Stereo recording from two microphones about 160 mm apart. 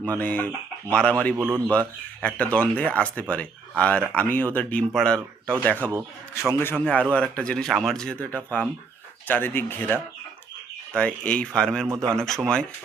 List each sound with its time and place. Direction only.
0.2 s speech: 10° left (ahead or behind)
1.4 s speech: 15° right (ahead or behind)
1.7 s speech: 10° left (ahead or behind)
11.9 s a man's voice: 20° right (ahead or behind)
12.1 s speech: 5° left (ahead or behind)